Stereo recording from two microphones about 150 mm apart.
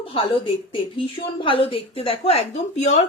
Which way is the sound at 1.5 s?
35° left (ahead or behind).